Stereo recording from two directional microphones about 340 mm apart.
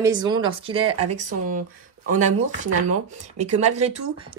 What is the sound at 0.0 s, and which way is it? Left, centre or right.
Speech, centre.